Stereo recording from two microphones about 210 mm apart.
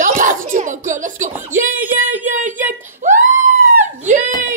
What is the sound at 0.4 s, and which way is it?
Music, 40° right (ahead or behind).